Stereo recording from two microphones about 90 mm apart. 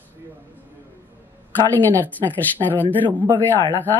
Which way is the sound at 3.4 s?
20° left (ahead or behind).